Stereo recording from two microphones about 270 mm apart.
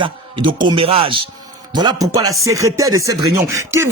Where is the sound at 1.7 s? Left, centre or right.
Centre.